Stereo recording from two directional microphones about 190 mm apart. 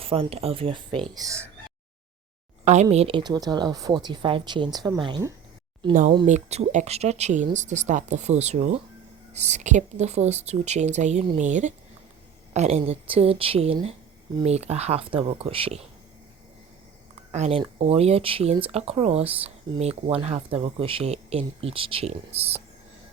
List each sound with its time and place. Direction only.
0.0 s speech: 30° right (ahead or behind)
2.9 s speech: 30° right (ahead or behind)
6.2 s speech: 35° right (ahead or behind)
17.3 s speech: 35° right (ahead or behind)